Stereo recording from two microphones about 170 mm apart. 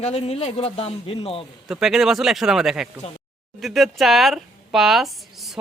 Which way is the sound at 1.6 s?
5° right (ahead or behind).